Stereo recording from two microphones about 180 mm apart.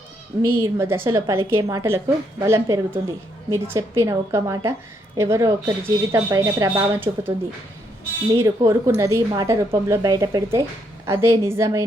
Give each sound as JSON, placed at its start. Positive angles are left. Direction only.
{"t": 0.6, "sound": "a woman's voice", "side_deg": -15}